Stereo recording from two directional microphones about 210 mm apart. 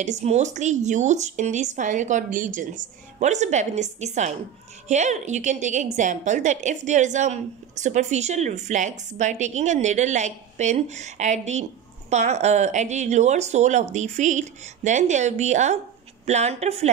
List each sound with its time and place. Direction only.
0.0 s a woman's voice: 35° right (ahead or behind)